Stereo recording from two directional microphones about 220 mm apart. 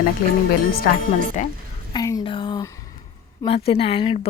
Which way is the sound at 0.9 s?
40° left (ahead or behind).